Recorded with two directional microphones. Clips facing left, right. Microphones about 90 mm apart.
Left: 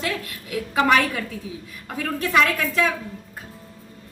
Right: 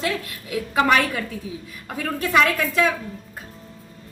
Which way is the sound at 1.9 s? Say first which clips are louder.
Right 1 dB; 10° right (ahead or behind).